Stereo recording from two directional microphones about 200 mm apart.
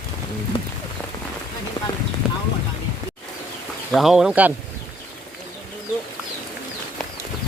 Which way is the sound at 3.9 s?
Centre (ahead or behind).